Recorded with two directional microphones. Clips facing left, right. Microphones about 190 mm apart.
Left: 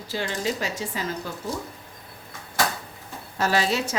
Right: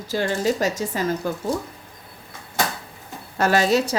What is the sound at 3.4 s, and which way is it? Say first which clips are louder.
Speech: right 5 dB; 50° right (ahead or behind).